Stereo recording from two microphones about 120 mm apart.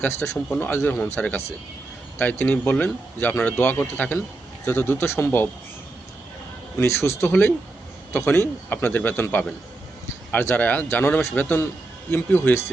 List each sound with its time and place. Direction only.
0.0 s speech: 15° left (ahead or behind)
6.7 s speech: 20° left (ahead or behind)